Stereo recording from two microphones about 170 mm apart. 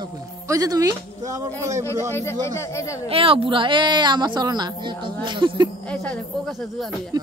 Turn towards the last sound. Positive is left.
turn(degrees=0)  # may be behind; listen again after turning